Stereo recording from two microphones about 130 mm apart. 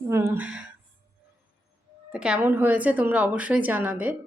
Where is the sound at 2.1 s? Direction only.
10° right (ahead or behind).